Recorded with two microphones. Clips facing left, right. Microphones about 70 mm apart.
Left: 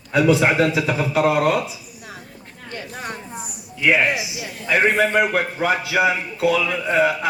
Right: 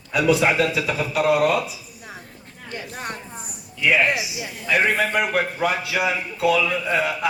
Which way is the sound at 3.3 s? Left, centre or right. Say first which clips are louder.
Left 4 dB; centre.